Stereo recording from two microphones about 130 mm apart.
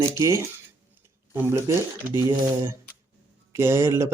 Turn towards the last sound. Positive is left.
turn(degrees=-20)  # may be behind; listen again after turning